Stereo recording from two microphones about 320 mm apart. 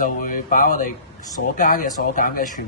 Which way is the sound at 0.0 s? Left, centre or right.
Left.